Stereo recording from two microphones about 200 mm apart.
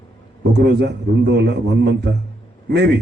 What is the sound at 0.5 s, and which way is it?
A man's voice, 60° right (ahead or behind).